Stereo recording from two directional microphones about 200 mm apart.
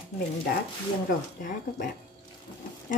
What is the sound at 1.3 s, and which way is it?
Speech, 40° left (ahead or behind).